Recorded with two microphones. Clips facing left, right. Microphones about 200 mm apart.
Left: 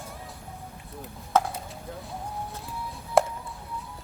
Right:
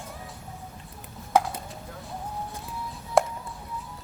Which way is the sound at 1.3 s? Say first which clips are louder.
Right 1 dB; 10° right (ahead or behind).